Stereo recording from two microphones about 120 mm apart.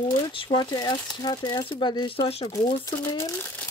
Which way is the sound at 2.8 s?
25° left (ahead or behind).